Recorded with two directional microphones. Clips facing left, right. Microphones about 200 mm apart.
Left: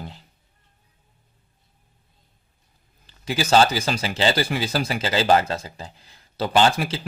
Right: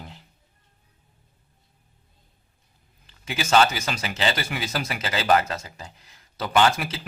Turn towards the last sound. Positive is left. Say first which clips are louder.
# left 2 dB
turn(degrees=30)  # may be behind; listen again after turning